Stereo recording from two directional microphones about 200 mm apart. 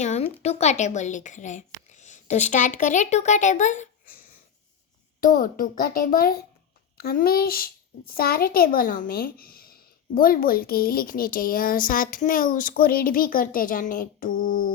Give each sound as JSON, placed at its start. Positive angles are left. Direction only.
{"t": 0.0, "sound": "a sound", "side_deg": 35}
{"t": 0.4, "sound": "speech", "side_deg": 35}
{"t": 5.2, "sound": "speech", "side_deg": 45}